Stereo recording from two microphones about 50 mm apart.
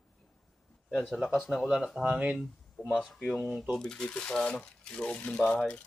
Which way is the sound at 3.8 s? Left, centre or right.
Centre.